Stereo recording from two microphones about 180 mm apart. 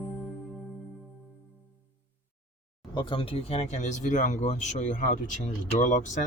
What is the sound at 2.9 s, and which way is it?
Speech, 25° left (ahead or behind).